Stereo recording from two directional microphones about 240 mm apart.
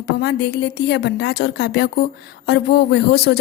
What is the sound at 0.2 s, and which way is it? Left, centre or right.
A woman's voice, left.